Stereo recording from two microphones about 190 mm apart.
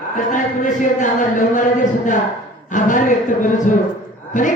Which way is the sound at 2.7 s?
45° left (ahead or behind).